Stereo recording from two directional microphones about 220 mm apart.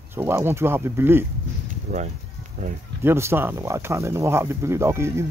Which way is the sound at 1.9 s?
35° right (ahead or behind).